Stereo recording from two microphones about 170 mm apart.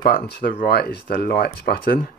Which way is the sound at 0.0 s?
65° left (ahead or behind).